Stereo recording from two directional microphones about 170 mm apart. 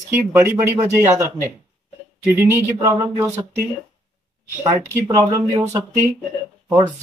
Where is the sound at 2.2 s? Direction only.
15° right (ahead or behind).